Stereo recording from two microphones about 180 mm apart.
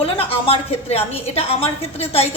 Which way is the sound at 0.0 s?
30° left (ahead or behind).